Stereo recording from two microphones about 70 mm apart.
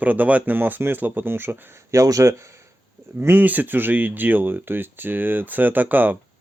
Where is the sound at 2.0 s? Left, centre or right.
Right.